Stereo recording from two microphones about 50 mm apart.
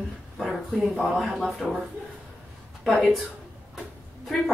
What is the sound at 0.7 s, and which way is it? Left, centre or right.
A woman's voice, centre.